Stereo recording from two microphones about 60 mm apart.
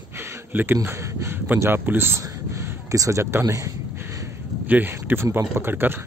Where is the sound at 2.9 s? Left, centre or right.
Right.